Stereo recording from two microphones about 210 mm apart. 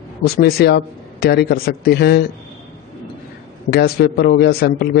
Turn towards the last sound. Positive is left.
turn(degrees=50)  # may be behind; listen again after turning